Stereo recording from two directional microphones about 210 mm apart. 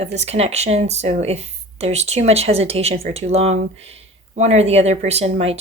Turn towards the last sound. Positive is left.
turn(degrees=-30)  # may be behind; listen again after turning